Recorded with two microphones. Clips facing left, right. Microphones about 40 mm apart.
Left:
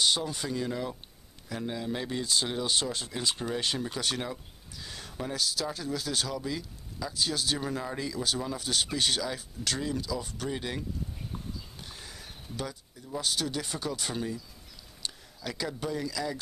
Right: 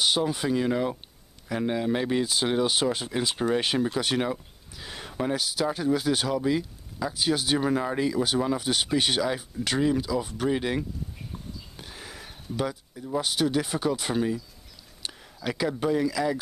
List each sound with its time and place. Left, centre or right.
0.0 s speech: right
11.7 s speech: centre